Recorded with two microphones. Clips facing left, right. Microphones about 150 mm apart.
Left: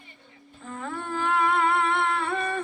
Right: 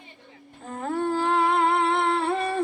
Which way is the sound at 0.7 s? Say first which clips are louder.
Right 7 dB; 40° right (ahead or behind).